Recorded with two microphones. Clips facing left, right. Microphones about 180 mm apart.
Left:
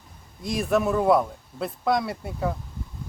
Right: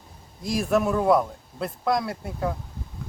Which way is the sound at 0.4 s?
Centre (ahead or behind).